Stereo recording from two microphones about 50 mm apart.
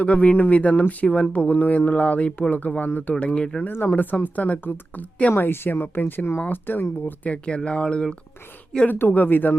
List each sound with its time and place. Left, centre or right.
0.0 s speech: left
3.7 s speech: left
5.4 s speech: left
7.0 s speech: left
8.9 s speech: left